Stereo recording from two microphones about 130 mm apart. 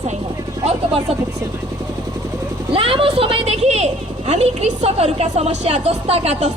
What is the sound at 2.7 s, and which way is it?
A woman's voice, 45° right (ahead or behind).